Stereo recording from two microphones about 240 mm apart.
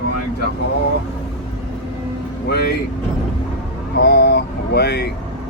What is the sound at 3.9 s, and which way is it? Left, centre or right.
Speech, left.